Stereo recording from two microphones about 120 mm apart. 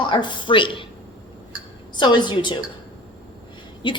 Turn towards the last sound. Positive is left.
turn(degrees=40)  # may be behind; listen again after turning